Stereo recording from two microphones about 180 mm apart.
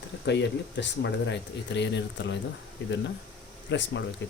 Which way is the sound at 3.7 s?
80° left.